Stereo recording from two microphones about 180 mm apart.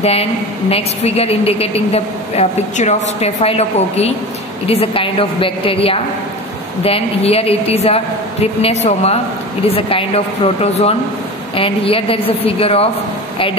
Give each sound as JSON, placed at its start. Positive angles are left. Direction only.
{"t": 0.0, "sound": "a woman's voice", "side_deg": 35}